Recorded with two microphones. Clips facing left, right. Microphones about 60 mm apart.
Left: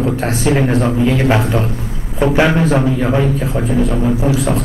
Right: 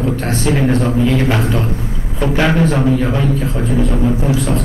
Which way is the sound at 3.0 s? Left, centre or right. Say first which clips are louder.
Left 1 dB; centre.